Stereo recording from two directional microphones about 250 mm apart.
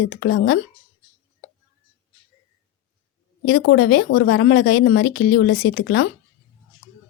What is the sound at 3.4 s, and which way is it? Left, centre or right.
Speech, left.